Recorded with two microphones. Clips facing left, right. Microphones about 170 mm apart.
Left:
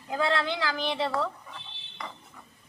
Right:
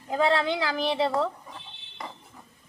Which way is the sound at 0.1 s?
25° right (ahead or behind).